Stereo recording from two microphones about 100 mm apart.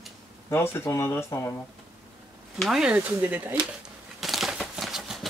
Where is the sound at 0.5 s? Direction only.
25° left (ahead or behind).